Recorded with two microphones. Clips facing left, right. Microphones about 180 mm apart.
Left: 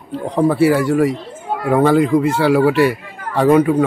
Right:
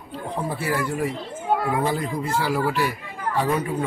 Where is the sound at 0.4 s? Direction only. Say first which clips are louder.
Left 13 dB; 80° left.